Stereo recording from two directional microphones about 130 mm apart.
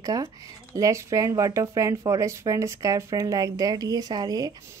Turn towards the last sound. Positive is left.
turn(degrees=-30)  # may be behind; listen again after turning